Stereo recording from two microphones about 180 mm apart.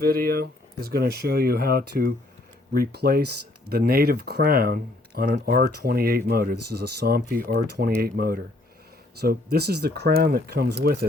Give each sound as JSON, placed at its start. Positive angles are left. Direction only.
{"t": 0.0, "sound": "speech", "side_deg": -55}